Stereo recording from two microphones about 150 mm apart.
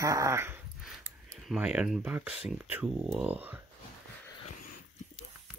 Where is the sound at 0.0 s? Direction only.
20° right (ahead or behind).